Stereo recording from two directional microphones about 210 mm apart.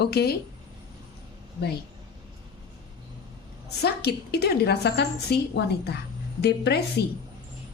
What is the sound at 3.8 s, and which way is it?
A woman's voice, 50° left (ahead or behind).